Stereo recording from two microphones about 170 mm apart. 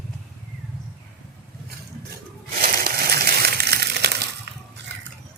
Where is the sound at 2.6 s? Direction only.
65° right (ahead or behind).